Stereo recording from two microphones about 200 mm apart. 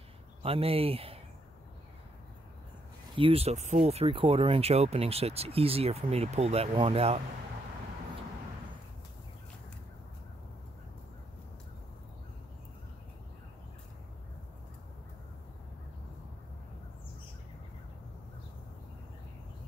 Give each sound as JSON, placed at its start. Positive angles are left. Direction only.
{"t": 0.4, "sound": "speech", "side_deg": -30}
{"t": 3.2, "sound": "speech", "side_deg": -30}